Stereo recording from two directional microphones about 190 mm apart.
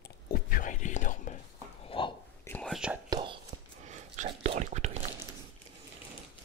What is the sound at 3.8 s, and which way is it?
Whispering, 40° right (ahead or behind).